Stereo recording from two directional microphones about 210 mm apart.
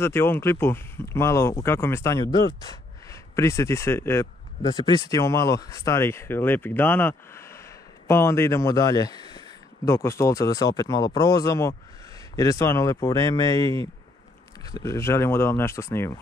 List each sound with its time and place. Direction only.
0.0 s speech: 10° left (ahead or behind)